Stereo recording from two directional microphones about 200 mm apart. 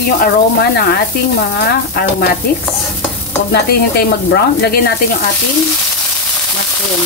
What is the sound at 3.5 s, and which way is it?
Speech, 55° left (ahead or behind).